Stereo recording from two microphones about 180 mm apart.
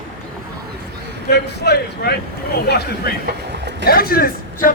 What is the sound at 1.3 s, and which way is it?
A man's voice, 65° left (ahead or behind).